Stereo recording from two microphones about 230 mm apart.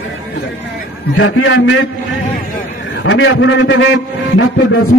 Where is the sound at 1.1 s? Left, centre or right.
Left.